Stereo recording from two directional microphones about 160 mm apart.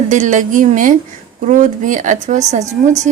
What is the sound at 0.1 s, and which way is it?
Speech, 50° right (ahead or behind).